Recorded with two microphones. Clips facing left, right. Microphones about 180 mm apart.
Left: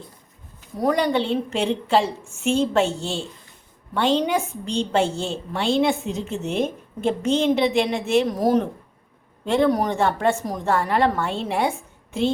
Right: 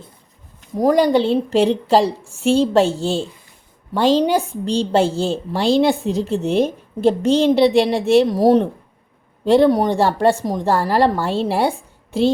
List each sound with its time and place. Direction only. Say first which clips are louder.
0.8 s a woman's voice: right 6 dB; 40° right (ahead or behind)